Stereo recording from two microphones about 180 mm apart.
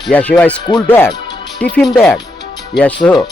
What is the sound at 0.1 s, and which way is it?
A man's voice, 5° left (ahead or behind).